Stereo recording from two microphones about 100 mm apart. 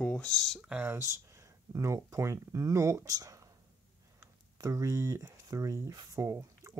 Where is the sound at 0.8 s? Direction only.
25° right (ahead or behind).